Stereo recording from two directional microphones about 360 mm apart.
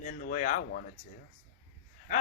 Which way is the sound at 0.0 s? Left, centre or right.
Left.